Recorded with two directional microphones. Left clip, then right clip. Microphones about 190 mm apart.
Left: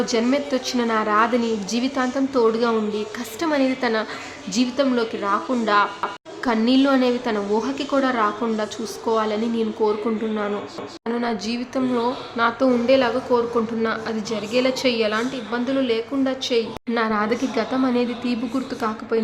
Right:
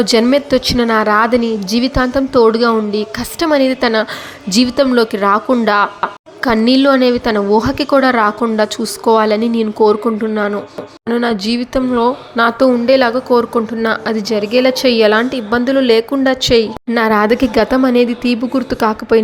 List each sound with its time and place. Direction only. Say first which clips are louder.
0.0 s speech: right 9 dB; 40° right (ahead or behind)
11.1 s speech: right 10 dB; 40° right (ahead or behind)